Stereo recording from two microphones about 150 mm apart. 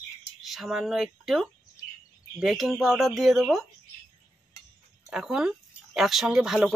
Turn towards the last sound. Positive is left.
turn(degrees=0)  # may be behind; listen again after turning